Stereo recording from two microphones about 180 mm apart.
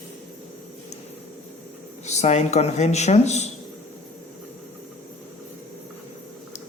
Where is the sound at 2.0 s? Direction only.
40° left (ahead or behind).